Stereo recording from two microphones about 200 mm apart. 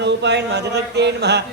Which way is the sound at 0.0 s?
60° right (ahead or behind).